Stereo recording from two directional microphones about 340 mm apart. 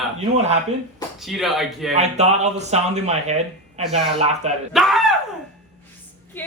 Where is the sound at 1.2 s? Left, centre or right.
Centre.